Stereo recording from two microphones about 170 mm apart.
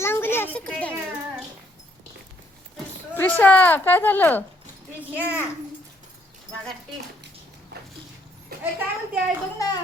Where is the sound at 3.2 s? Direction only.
10° left (ahead or behind).